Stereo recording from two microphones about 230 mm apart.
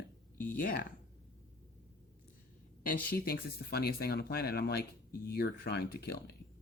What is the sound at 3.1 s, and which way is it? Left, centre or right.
Speech, left.